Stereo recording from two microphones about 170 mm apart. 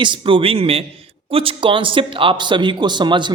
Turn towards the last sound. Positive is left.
turn(degrees=-25)  # may be behind; listen again after turning